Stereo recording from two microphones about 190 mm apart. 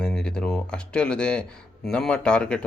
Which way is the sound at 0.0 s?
5° left (ahead or behind).